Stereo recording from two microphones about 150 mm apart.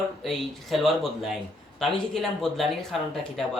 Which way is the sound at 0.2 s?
Centre (ahead or behind).